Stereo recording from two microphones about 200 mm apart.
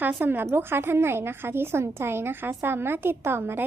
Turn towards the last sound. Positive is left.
turn(degrees=-10)  # may be behind; listen again after turning